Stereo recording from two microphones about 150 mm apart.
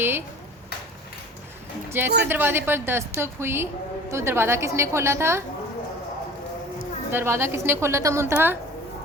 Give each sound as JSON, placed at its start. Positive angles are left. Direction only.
{"t": 1.9, "sound": "a woman's voice", "side_deg": -15}
{"t": 7.1, "sound": "a woman's voice", "side_deg": -15}